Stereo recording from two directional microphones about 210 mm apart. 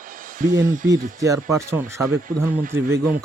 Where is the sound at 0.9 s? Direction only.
15° right (ahead or behind).